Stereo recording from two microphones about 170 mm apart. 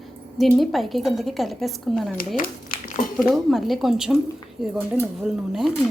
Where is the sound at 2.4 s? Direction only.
55° left (ahead or behind).